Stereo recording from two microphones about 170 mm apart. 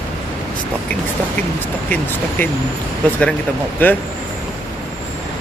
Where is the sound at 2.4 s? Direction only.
10° left (ahead or behind).